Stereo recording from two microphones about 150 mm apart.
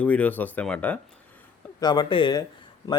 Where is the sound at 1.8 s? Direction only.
30° left (ahead or behind).